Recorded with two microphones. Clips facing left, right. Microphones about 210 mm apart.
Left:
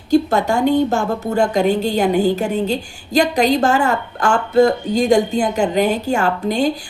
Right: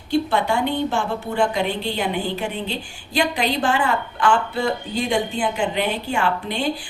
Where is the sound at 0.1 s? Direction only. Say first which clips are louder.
Left 5 dB; 40° left (ahead or behind).